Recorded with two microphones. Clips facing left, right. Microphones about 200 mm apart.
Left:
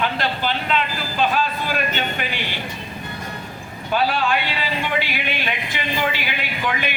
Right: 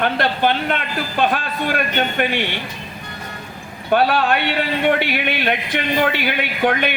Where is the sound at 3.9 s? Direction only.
60° right (ahead or behind).